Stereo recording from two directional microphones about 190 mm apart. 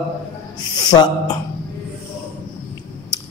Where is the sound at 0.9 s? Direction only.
20° left (ahead or behind).